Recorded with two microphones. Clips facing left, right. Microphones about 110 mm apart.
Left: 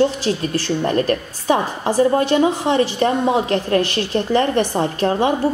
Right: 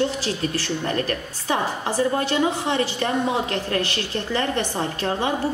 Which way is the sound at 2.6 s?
35° left (ahead or behind).